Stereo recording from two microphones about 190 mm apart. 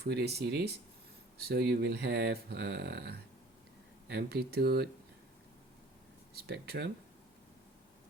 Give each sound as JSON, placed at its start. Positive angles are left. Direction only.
{"t": 0.0, "sound": "speech", "side_deg": -60}
{"t": 6.3, "sound": "speech", "side_deg": -55}